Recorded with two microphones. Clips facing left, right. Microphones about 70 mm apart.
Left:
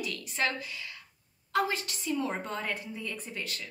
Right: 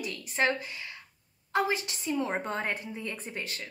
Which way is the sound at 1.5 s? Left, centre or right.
Right.